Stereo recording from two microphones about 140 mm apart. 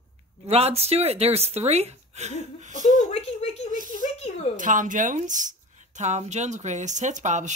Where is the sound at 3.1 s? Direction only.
45° left (ahead or behind).